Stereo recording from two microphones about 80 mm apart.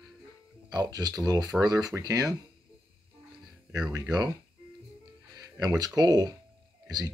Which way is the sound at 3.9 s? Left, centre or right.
Right.